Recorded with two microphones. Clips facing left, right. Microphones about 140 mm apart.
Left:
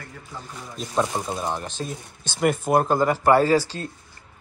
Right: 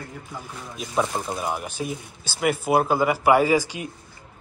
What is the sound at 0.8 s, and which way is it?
Speech, 5° right (ahead or behind).